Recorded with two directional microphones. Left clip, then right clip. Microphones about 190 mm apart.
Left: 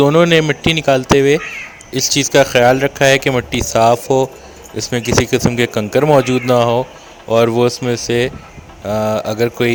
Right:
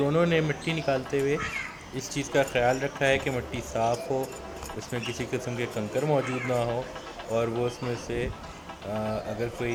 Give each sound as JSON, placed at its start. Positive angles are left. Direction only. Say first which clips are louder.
{"t": 0.0, "sound": "speech", "louder": "left 14 dB", "side_deg": 45}